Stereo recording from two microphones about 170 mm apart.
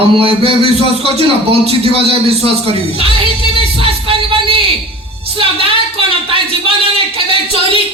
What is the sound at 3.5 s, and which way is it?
Music, 35° right (ahead or behind).